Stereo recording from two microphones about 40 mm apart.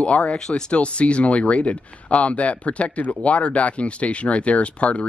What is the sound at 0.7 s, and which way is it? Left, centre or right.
Speech, left.